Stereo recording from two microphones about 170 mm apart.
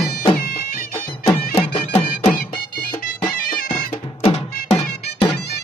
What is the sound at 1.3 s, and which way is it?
Music, 35° left (ahead or behind).